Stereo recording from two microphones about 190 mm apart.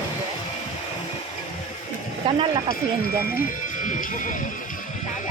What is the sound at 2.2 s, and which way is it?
Speech, 30° right (ahead or behind).